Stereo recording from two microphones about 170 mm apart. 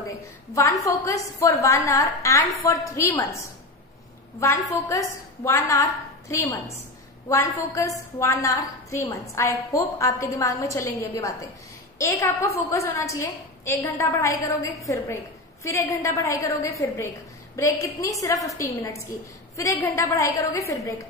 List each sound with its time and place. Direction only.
0.8 s a woman's voice: 20° left (ahead or behind)
4.4 s a woman's voice: 15° left (ahead or behind)